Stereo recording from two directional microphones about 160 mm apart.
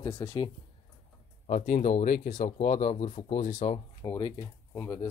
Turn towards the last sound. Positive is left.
turn(degrees=20)  # may be behind; listen again after turning